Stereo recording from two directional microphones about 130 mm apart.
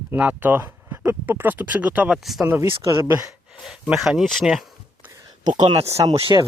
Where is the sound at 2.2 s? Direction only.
Centre (ahead or behind).